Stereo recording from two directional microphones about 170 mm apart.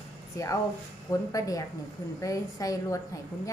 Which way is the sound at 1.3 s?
20° left (ahead or behind).